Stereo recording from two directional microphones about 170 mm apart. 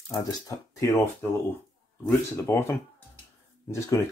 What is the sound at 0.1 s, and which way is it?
Speech, 20° left (ahead or behind).